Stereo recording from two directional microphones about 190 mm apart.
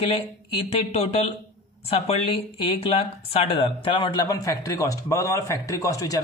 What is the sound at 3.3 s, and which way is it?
A man's voice, 30° left (ahead or behind).